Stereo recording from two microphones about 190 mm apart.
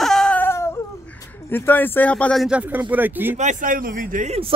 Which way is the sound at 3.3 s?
45° right (ahead or behind).